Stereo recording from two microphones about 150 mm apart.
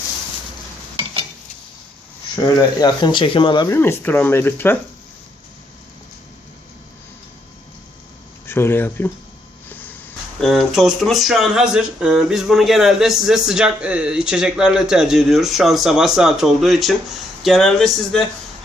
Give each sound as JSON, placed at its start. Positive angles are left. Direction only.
{"t": 2.3, "sound": "speech", "side_deg": 25}
{"t": 3.7, "sound": "speech", "side_deg": 15}
{"t": 8.4, "sound": "speech", "side_deg": 15}
{"t": 9.6, "sound": "a sound", "side_deg": 10}
{"t": 10.4, "sound": "speech", "side_deg": 0}